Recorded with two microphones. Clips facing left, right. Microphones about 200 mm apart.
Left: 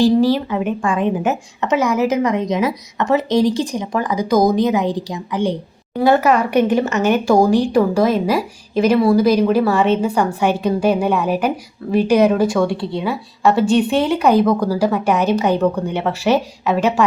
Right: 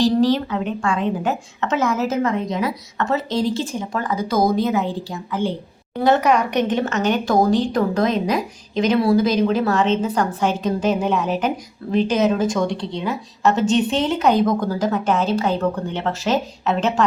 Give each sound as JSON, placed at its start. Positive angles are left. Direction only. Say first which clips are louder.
{"t": 0.0, "sound": "a woman's voice", "louder": "left 3 dB", "side_deg": 10}
{"t": 6.0, "sound": "a woman's voice", "louder": "left 3 dB", "side_deg": 5}
{"t": 12.4, "sound": "a woman's voice", "louder": "left 4 dB", "side_deg": -20}
{"t": 12.6, "sound": "a woman's voice", "louder": "left 3 dB", "side_deg": 5}